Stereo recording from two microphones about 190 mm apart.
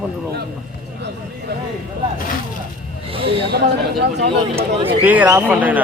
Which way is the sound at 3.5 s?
60° right (ahead or behind).